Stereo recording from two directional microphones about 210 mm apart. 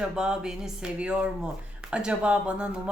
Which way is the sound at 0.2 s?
5° right (ahead or behind).